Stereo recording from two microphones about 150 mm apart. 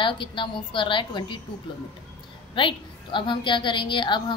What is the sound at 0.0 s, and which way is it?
A woman's voice, 35° left (ahead or behind).